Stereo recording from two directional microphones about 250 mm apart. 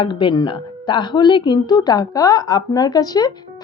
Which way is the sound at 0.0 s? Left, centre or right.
Centre.